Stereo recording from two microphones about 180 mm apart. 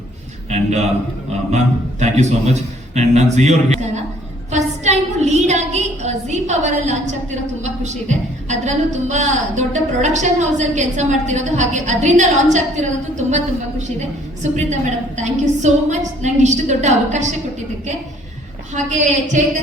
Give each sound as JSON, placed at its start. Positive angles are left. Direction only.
{"t": 0.5, "sound": "a man's voice", "side_deg": -40}
{"t": 18.7, "sound": "a woman's voice", "side_deg": -40}